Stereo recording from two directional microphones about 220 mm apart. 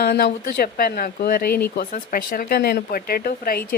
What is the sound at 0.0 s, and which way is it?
Speech, 45° left (ahead or behind).